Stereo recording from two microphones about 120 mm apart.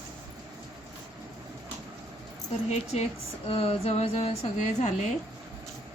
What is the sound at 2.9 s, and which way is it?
Music, 60° left (ahead or behind).